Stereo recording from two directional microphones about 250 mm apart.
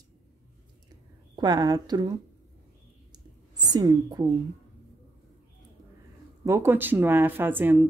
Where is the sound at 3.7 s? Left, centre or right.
Centre.